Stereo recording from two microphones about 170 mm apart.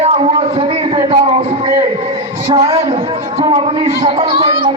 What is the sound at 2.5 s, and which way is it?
Speech, 35° right (ahead or behind).